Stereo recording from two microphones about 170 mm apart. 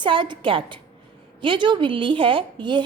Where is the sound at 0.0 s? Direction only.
30° right (ahead or behind).